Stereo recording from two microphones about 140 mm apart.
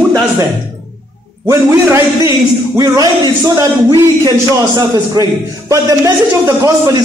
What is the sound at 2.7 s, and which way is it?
Speech, 30° right (ahead or behind).